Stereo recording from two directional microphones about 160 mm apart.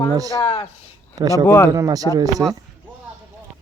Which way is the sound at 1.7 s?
20° right (ahead or behind).